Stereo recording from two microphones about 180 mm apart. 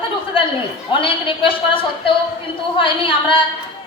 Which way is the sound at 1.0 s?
30° left (ahead or behind).